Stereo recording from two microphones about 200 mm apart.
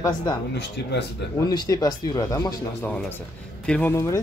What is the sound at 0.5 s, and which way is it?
Speech, 55° left (ahead or behind).